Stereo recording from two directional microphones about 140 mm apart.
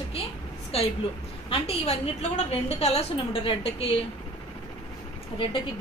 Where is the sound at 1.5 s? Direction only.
45° left (ahead or behind).